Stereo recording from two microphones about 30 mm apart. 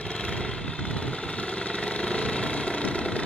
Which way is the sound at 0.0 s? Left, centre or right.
Left.